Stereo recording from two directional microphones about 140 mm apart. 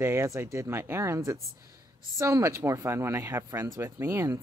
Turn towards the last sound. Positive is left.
turn(degrees=-20)  # may be behind; listen again after turning